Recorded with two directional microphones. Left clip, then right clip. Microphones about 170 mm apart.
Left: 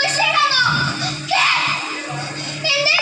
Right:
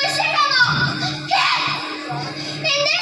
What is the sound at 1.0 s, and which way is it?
Music, 15° left (ahead or behind).